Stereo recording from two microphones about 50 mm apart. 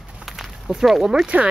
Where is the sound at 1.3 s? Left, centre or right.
Right.